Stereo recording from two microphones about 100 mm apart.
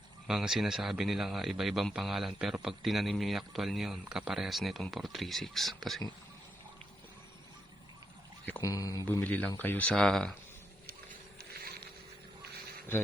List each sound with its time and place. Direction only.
0.3 s speech: 5° right (ahead or behind)
8.6 s speech: 35° left (ahead or behind)
9.0 s speech: 15° left (ahead or behind)
9.9 s speech: 5° left (ahead or behind)